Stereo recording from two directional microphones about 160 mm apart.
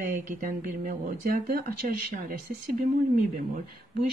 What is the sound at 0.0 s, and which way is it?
Speech, 60° right (ahead or behind).